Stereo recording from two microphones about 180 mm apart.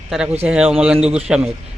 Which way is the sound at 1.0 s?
35° right (ahead or behind).